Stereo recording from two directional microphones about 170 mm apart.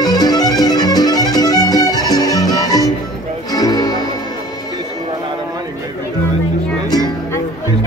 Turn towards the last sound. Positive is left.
turn(degrees=25)  # may be behind; listen again after turning